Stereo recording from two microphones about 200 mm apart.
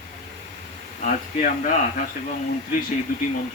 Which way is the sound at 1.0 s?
40° left (ahead or behind).